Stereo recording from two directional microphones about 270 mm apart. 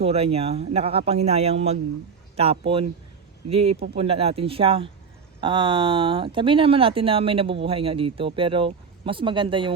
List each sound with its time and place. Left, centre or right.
0.0 s speech: right
3.9 s speech: right